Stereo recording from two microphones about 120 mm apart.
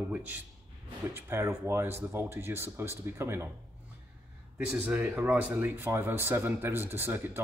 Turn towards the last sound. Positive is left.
turn(degrees=-20)  # may be behind; listen again after turning